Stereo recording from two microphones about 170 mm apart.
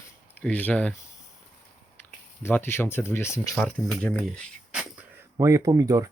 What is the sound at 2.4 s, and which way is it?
Speech, 15° left (ahead or behind).